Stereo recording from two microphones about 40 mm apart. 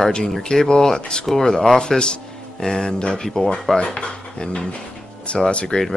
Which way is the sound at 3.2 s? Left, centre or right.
Centre.